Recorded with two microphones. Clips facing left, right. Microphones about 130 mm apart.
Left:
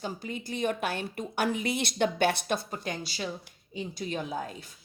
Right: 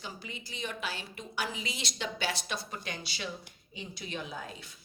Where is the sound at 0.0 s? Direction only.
45° left (ahead or behind).